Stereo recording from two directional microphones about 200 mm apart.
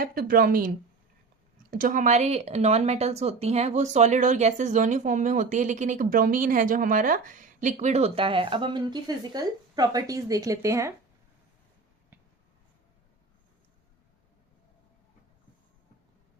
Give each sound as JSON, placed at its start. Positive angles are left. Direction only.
{"t": 0.0, "sound": "speech", "side_deg": -50}
{"t": 1.7, "sound": "speech", "side_deg": -45}